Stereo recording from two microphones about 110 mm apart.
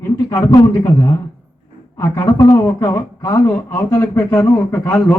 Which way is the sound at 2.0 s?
20° left (ahead or behind).